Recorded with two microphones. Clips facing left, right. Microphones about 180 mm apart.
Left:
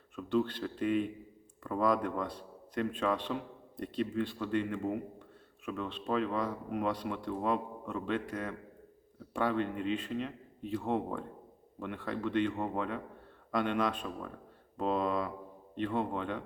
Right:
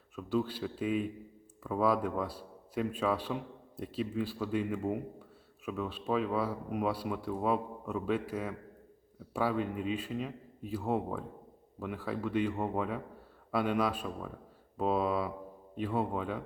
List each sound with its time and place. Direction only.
0.2 s a man's voice: 5° right (ahead or behind)